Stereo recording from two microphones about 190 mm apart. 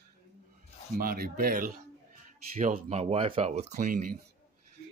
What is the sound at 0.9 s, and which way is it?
Speech, 50° right (ahead or behind).